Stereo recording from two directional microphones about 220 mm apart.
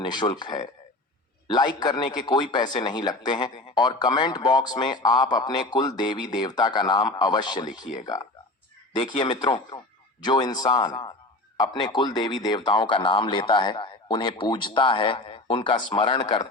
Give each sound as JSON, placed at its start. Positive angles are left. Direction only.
{"t": 0.0, "sound": "a man's voice", "side_deg": 20}